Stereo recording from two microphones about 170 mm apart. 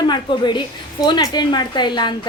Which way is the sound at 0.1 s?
25° left (ahead or behind).